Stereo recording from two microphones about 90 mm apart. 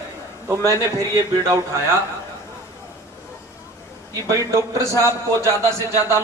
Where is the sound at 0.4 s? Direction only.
35° right (ahead or behind).